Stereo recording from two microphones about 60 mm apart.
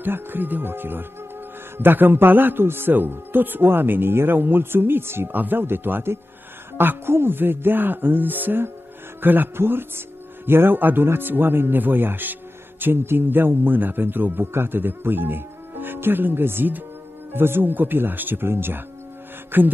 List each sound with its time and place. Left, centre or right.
0.0 s speech: right